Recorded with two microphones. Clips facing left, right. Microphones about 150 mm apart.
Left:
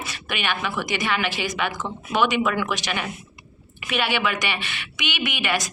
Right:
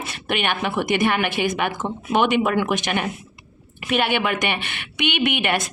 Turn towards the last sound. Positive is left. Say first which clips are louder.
# right 4 dB
turn(degrees=-55)  # may be behind; listen again after turning